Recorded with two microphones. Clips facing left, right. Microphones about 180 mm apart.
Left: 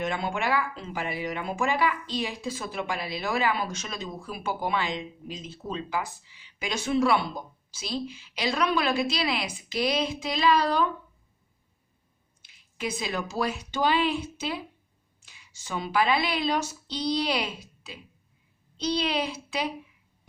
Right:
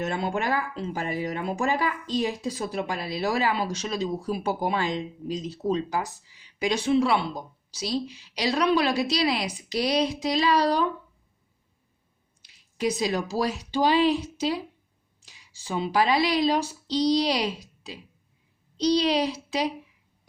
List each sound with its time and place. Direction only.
0.0 s speech: 40° right (ahead or behind)
12.4 s speech: 35° right (ahead or behind)